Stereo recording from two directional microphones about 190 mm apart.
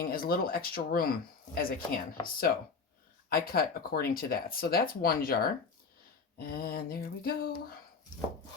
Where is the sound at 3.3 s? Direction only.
55° left (ahead or behind).